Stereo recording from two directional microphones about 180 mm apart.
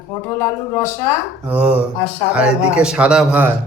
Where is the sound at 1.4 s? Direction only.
5° right (ahead or behind).